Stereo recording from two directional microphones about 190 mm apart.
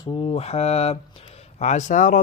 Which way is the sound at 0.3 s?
35° left (ahead or behind).